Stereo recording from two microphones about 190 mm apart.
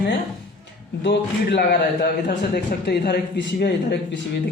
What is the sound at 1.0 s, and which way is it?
Speech, 60° left (ahead or behind).